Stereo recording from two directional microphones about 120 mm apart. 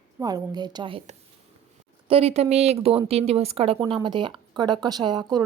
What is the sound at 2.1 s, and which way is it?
Speech, 55° right (ahead or behind).